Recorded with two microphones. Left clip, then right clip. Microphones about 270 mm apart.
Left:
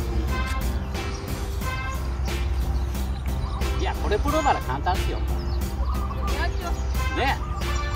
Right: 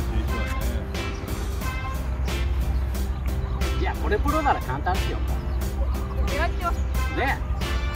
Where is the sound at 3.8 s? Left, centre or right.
Left.